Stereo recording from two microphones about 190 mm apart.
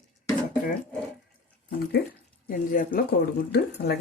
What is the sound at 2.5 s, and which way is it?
Speech, 50° left (ahead or behind).